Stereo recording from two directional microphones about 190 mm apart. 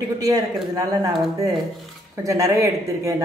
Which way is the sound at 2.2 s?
15° right (ahead or behind).